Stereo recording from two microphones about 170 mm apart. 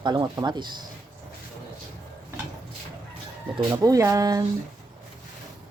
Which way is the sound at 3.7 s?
20° right (ahead or behind).